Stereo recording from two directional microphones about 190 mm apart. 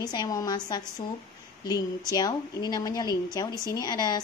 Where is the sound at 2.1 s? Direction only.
20° left (ahead or behind).